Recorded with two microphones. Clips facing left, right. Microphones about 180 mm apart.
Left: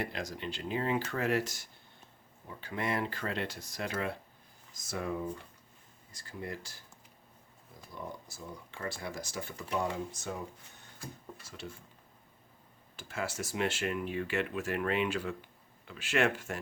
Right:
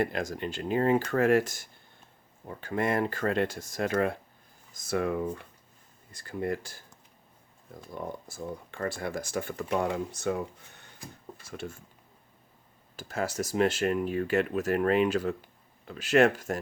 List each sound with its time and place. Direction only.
0.0 s speech: 50° right (ahead or behind)
4.7 s speech: 60° right (ahead or behind)
8.3 s speech: 55° right (ahead or behind)
11.4 s speech: 50° right (ahead or behind)
13.0 s speech: 40° right (ahead or behind)